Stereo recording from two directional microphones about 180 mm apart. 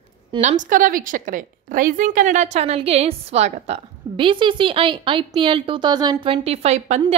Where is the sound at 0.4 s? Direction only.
45° right (ahead or behind).